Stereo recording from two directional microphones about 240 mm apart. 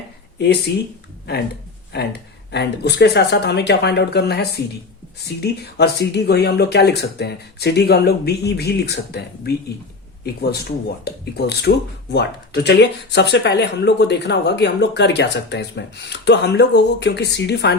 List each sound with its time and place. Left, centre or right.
0.3 s speech: left
1.9 s speech: left